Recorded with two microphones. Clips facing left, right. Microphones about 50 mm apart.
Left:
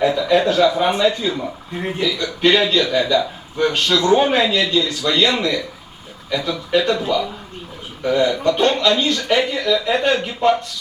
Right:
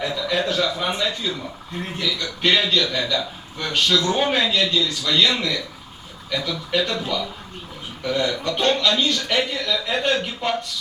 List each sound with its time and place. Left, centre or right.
0.0 s a man's voice: left